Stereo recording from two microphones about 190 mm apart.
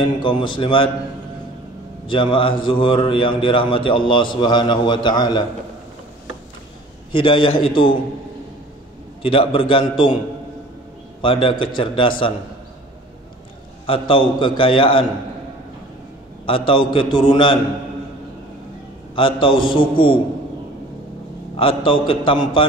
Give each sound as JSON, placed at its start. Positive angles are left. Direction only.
{"t": 0.0, "sound": "a man's voice", "side_deg": 25}
{"t": 2.0, "sound": "a man's voice", "side_deg": 25}
{"t": 7.1, "sound": "a man's voice", "side_deg": 25}
{"t": 9.2, "sound": "a man's voice", "side_deg": 30}
{"t": 11.1, "sound": "a man's voice", "side_deg": 25}
{"t": 13.8, "sound": "a man's voice", "side_deg": 30}
{"t": 16.4, "sound": "a man's voice", "side_deg": 25}
{"t": 19.1, "sound": "a man's voice", "side_deg": 25}
{"t": 21.5, "sound": "a man's voice", "side_deg": 25}